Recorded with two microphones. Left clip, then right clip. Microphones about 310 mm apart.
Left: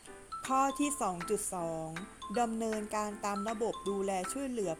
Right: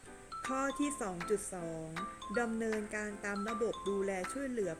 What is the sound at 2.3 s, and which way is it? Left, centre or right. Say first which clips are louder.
Speech: left 3 dB; centre.